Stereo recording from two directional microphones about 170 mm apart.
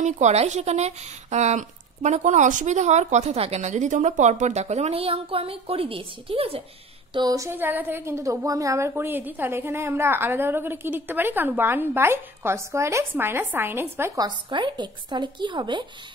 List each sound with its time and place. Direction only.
0.0 s a woman's voice: 40° right (ahead or behind)
7.2 s a woman's voice: 20° right (ahead or behind)